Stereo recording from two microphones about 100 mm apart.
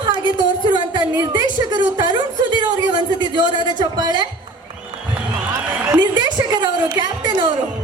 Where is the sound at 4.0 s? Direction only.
45° right (ahead or behind).